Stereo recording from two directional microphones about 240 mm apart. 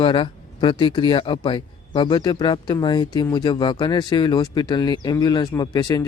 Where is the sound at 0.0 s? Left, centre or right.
Centre.